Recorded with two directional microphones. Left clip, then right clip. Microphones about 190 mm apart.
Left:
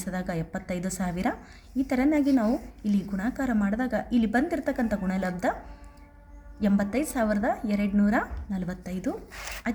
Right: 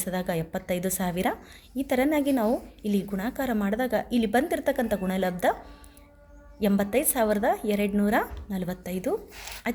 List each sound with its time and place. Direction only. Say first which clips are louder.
0.0 s a woman's voice: right 4 dB; 30° right (ahead or behind)
6.6 s a woman's voice: right 3 dB; 30° right (ahead or behind)